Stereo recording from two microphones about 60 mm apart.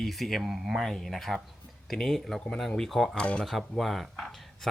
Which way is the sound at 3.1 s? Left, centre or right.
Centre.